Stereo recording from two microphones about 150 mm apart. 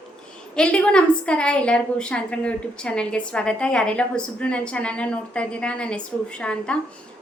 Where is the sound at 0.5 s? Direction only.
5° left (ahead or behind).